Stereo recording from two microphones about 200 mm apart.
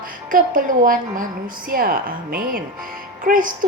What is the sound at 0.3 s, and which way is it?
A woman's voice, 45° right (ahead or behind).